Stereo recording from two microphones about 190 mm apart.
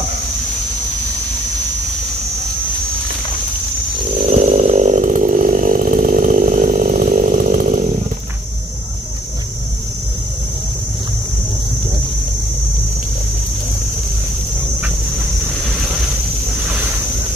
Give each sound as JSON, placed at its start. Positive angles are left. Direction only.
{"t": 4.3, "sound": "chainsaw", "side_deg": -35}